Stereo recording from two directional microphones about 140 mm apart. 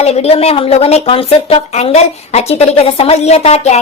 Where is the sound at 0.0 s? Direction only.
50° left (ahead or behind).